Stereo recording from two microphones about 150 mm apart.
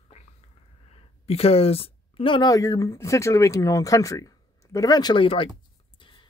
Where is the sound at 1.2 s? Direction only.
40° left (ahead or behind).